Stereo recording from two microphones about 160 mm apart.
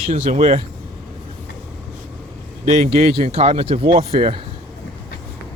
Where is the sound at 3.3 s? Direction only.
40° right (ahead or behind).